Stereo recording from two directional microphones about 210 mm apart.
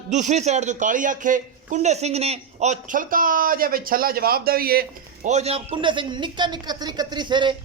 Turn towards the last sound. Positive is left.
turn(degrees=-20)  # may be behind; listen again after turning